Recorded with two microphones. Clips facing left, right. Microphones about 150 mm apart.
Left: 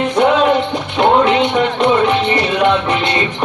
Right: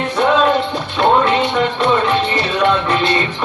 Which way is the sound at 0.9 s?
15° left (ahead or behind).